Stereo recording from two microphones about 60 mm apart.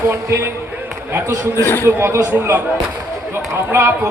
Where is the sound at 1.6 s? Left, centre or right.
Left.